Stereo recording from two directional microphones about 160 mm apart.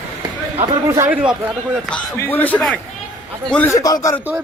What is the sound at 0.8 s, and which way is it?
Speech, 20° right (ahead or behind).